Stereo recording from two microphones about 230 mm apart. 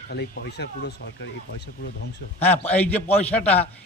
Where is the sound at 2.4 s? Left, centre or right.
Centre.